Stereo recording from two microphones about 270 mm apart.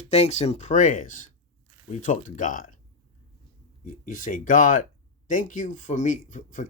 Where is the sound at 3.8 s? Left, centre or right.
Left.